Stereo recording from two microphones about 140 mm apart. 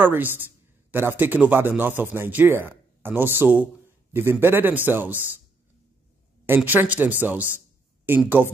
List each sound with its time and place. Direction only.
0.0 s speech: 15° right (ahead or behind)
6.4 s speech: 15° right (ahead or behind)